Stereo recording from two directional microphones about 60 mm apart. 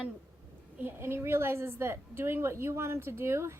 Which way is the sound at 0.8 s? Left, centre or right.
Right.